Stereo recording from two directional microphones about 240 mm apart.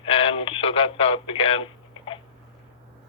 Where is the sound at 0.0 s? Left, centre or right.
Left.